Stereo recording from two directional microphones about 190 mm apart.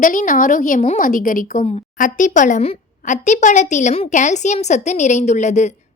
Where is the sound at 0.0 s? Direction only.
45° left (ahead or behind).